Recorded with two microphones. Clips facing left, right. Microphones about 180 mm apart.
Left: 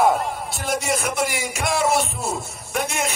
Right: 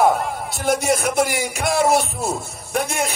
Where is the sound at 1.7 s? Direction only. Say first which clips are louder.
Right 3 dB; 55° right (ahead or behind).